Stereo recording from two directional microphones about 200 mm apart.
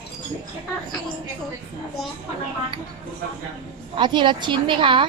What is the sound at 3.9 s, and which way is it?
A woman's voice, 25° right (ahead or behind).